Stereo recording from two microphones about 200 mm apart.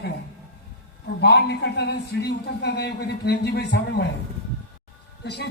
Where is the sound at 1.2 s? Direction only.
55° left (ahead or behind).